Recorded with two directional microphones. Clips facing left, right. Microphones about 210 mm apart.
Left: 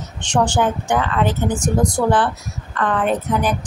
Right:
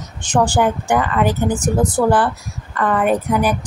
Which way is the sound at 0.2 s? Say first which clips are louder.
Right 2 dB; 10° right (ahead or behind).